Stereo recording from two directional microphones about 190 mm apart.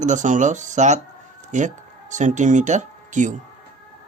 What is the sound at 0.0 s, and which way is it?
Speech, 40° right (ahead or behind).